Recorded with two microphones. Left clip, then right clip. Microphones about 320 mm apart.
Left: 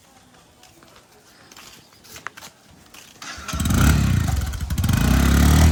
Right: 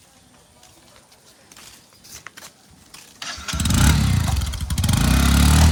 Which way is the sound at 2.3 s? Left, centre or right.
Left.